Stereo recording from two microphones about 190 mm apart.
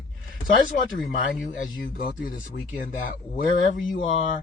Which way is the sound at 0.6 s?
45° left (ahead or behind).